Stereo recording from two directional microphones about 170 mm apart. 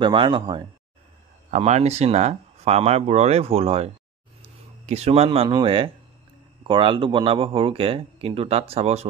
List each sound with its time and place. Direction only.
0.0 s speech: 30° right (ahead or behind)
1.5 s speech: 40° right (ahead or behind)